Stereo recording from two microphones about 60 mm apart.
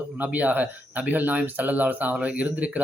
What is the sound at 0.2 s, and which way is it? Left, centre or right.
Speech, right.